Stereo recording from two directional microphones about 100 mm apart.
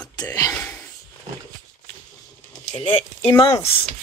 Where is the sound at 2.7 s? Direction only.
90° left.